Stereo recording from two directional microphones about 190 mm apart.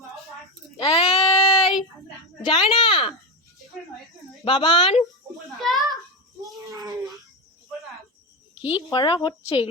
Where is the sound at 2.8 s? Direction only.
25° left (ahead or behind).